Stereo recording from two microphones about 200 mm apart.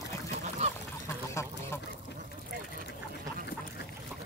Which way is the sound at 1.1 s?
15° left (ahead or behind).